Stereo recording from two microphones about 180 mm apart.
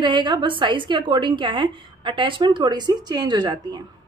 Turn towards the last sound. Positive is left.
turn(degrees=-25)  # may be behind; listen again after turning